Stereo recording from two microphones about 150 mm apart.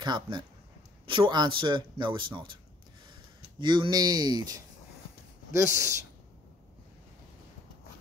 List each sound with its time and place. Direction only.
0.0 s speech: 30° right (ahead or behind)
3.5 s speech: 30° right (ahead or behind)